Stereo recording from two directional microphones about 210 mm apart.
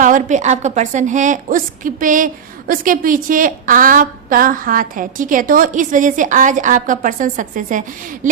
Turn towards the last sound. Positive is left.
turn(degrees=-40)  # may be behind; listen again after turning